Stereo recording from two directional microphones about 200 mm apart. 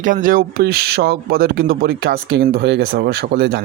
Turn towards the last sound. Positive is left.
turn(degrees=-50)  # may be behind; listen again after turning